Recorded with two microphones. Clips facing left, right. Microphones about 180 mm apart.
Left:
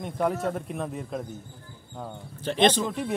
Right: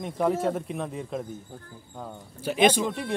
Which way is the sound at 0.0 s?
Centre (ahead or behind).